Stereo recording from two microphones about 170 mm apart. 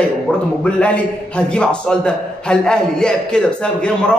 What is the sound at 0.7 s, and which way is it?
A man's voice, 5° left (ahead or behind).